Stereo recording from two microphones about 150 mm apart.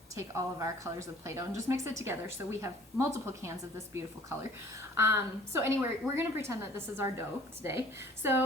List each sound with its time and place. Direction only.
0.2 s a woman's voice: 20° right (ahead or behind)
4.9 s a woman's voice: 15° right (ahead or behind)